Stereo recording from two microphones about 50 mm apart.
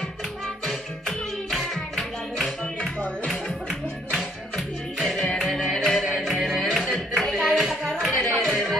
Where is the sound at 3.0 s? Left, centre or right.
Left.